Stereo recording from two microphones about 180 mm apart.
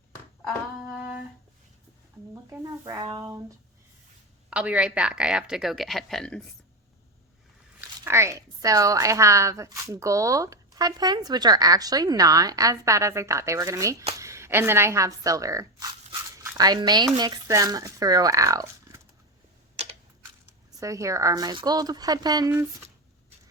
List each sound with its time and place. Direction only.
2.3 s speech: 15° right (ahead or behind)
4.4 s speech: 5° right (ahead or behind)
7.8 s speech: 15° right (ahead or behind)
19.7 s a sound: 35° right (ahead or behind)
20.7 s speech: 20° right (ahead or behind)